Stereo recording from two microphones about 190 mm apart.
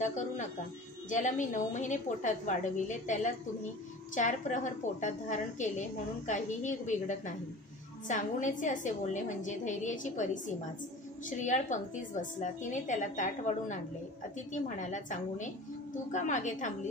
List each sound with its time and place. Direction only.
0.0 s a woman's voice: 40° left (ahead or behind)